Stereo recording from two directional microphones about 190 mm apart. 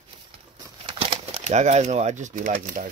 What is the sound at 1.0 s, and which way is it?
Speech, 35° right (ahead or behind).